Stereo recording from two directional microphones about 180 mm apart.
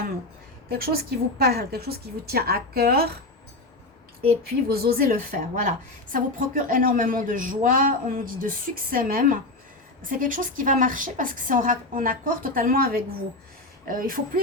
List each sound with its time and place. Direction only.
0.7 s a woman's voice: 55° right (ahead or behind)
4.7 s a woman's voice: 60° right (ahead or behind)